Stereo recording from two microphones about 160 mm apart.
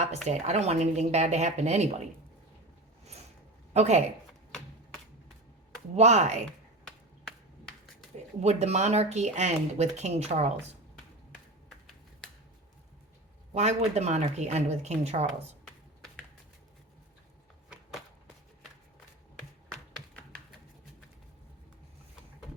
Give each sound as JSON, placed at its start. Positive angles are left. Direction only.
{"t": 0.3, "sound": "speech", "side_deg": -45}
{"t": 3.7, "sound": "speech", "side_deg": -45}
{"t": 6.0, "sound": "speech", "side_deg": -45}
{"t": 6.8, "sound": "a sound", "side_deg": 5}
{"t": 8.4, "sound": "speech", "side_deg": -45}
{"t": 13.5, "sound": "speech", "side_deg": -45}